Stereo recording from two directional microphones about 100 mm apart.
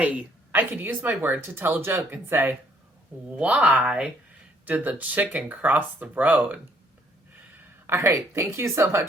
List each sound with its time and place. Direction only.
0.0 s speech: 15° right (ahead or behind)
7.9 s speech: 30° right (ahead or behind)